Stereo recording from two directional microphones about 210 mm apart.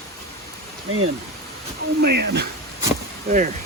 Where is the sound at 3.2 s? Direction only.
40° right (ahead or behind).